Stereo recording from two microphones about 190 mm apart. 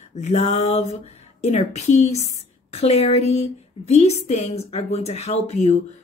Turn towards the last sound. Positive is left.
turn(degrees=35)  # may be behind; listen again after turning